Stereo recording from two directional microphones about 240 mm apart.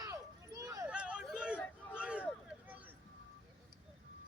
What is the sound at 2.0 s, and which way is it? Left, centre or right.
Boat, centre.